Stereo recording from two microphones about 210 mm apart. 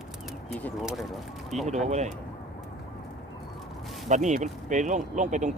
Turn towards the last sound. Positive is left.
turn(degrees=-35)  # may be behind; listen again after turning